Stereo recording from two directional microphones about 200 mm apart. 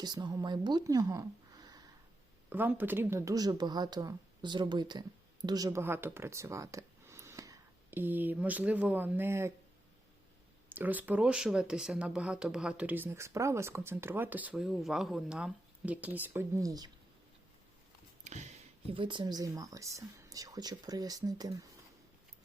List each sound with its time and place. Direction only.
0.0 s speech: 20° right (ahead or behind)
10.7 s speech: 10° right (ahead or behind)
18.3 s a sound: 35° right (ahead or behind)
18.9 s speech: 25° right (ahead or behind)